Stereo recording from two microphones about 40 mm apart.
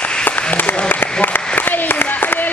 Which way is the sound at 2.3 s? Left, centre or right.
Left.